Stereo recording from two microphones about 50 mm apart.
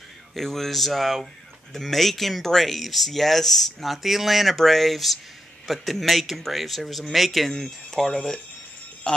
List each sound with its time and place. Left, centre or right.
0.4 s speech: centre